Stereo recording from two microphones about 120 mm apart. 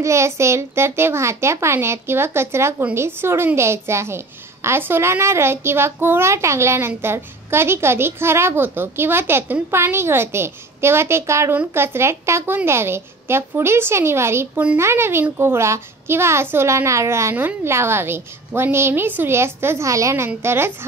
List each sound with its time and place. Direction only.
0.0 s a woman's voice: 25° right (ahead or behind)